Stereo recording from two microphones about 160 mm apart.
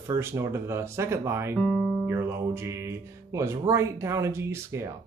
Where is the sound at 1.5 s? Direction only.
Centre (ahead or behind).